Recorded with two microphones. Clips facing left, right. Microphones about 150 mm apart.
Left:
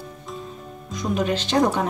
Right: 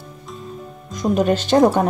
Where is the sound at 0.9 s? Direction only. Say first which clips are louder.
Right 6 dB; 45° right (ahead or behind).